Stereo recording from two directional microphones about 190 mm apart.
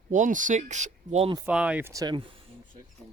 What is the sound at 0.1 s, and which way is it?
Speech, 40° right (ahead or behind).